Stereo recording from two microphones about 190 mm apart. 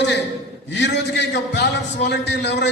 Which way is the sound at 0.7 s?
65° left (ahead or behind).